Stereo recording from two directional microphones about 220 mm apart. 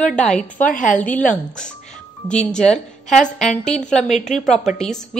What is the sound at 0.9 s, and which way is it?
Speech, 5° left (ahead or behind).